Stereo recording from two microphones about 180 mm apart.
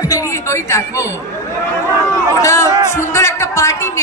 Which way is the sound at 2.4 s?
15° left (ahead or behind).